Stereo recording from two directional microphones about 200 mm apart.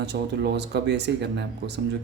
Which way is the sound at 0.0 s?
60° right (ahead or behind).